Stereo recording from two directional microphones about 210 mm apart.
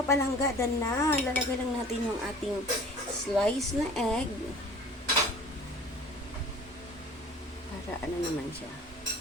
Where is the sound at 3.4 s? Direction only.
Centre (ahead or behind).